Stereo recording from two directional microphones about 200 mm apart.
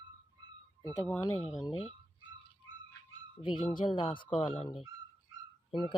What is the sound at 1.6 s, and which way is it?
Speech, 25° left (ahead or behind).